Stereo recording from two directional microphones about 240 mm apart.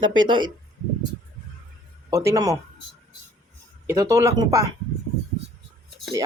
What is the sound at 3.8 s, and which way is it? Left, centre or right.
Speech, centre.